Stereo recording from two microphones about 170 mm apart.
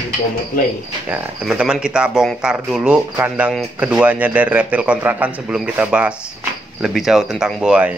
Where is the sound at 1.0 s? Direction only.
5° right (ahead or behind).